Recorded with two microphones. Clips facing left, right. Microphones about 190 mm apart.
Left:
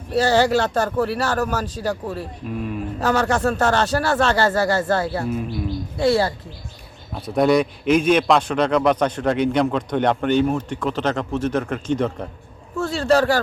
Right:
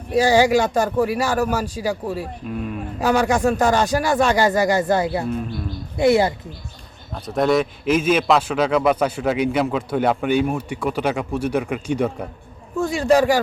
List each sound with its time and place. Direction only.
0.1 s a man's voice: 10° right (ahead or behind)
2.5 s speech: centre (ahead or behind)
3.0 s a man's voice: 10° right (ahead or behind)
5.2 s speech: 5° left (ahead or behind)
6.0 s a woman's voice: 20° right (ahead or behind)
7.1 s a man's voice: centre (ahead or behind)